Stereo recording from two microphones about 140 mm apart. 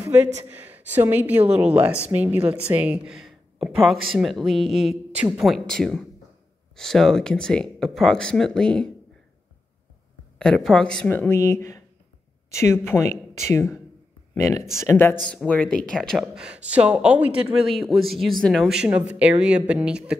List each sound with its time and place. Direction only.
0.0 s a sound: 15° right (ahead or behind)
0.5 s speech: 10° right (ahead or behind); by 8.9 s 5° left (ahead or behind)
10.4 s a woman's voice: 5° left (ahead or behind)
15.2 s speech: 5° left (ahead or behind)